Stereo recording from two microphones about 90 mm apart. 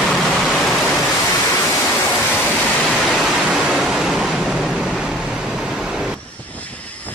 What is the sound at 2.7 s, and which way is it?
Pink noise, 5° left (ahead or behind).